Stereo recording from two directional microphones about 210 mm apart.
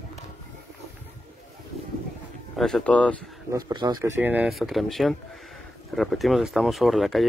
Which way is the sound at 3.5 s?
20° right (ahead or behind).